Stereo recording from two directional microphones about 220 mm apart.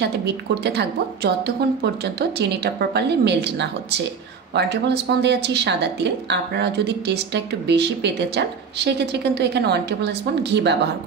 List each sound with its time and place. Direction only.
0.0 s a woman's voice: 50° right (ahead or behind)